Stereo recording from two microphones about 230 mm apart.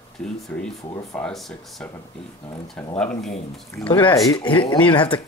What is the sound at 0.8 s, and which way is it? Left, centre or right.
Speech, centre.